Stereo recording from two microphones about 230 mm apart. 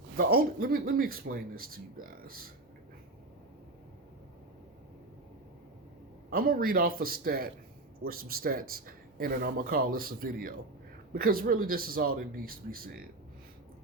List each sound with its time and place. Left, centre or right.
0.2 s speech: right
6.3 s speech: right